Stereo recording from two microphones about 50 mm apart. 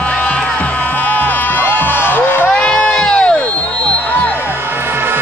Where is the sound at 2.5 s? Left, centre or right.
Left.